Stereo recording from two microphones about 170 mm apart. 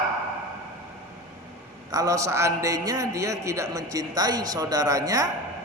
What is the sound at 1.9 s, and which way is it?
A man's voice, 20° right (ahead or behind).